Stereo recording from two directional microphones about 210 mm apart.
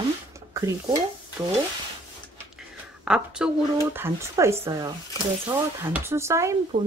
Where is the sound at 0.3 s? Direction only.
15° right (ahead or behind).